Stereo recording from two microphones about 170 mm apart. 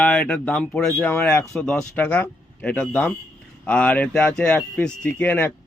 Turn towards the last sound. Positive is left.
turn(degrees=10)  # may be behind; listen again after turning